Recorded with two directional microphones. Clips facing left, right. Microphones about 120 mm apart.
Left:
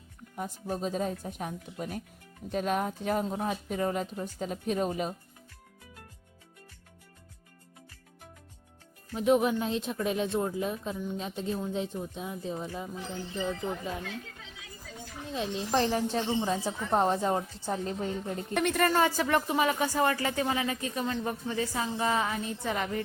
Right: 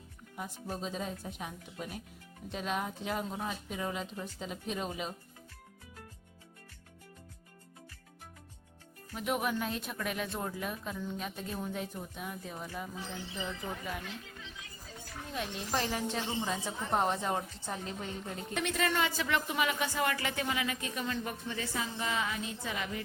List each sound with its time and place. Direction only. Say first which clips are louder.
0.3 s speech: left 5 dB; 40° left (ahead or behind)
9.1 s speech: left 8 dB; 30° left (ahead or behind)
15.3 s speech: left 6 dB; 25° left (ahead or behind)
15.7 s speech: left 6 dB; 35° left (ahead or behind)
18.5 s speech: left 6 dB; 55° left (ahead or behind)
18.9 s speech: left 6 dB; 40° left (ahead or behind)